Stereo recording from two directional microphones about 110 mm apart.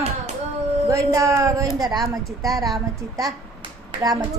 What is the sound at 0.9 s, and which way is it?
A woman's voice, 30° right (ahead or behind).